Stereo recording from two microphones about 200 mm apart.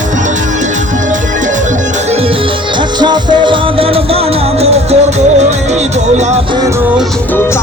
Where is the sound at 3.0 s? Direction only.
20° right (ahead or behind).